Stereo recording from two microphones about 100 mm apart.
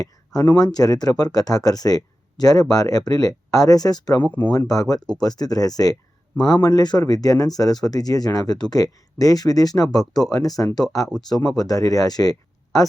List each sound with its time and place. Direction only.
0.5 s speech: 40° left (ahead or behind)